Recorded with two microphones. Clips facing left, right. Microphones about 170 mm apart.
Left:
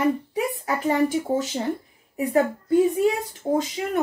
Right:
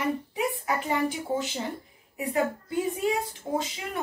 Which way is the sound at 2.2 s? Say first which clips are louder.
Left 6 dB; 45° left (ahead or behind).